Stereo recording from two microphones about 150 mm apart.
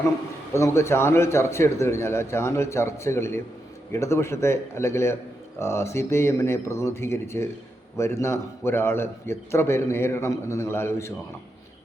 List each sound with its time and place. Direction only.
0.5 s a man's voice: 20° left (ahead or behind)